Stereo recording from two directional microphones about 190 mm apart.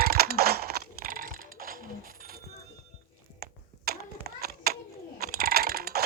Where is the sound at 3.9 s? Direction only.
55° right (ahead or behind).